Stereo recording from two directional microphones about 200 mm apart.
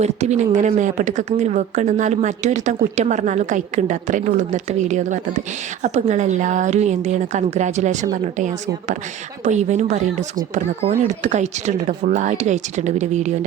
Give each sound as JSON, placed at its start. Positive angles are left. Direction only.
{"t": 0.0, "sound": "speech", "side_deg": -35}